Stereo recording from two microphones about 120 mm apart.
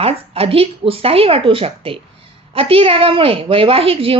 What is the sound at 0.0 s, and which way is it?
A woman's voice, 50° right (ahead or behind).